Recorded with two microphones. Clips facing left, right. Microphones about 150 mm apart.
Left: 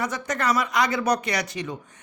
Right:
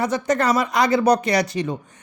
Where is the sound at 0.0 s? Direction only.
30° right (ahead or behind).